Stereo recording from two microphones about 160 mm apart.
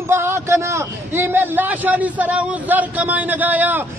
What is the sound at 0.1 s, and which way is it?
A man's voice, 15° right (ahead or behind).